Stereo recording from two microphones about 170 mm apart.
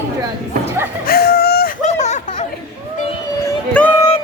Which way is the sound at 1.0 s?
65° left (ahead or behind).